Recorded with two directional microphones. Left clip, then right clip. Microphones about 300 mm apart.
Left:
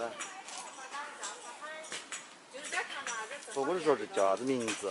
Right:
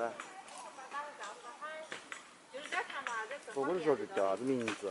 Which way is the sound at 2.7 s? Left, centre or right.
Centre.